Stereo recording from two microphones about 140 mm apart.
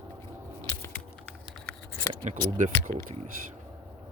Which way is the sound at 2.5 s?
60° right (ahead or behind).